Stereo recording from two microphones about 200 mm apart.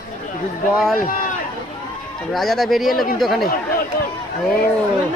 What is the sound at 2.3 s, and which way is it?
Speech, centre (ahead or behind).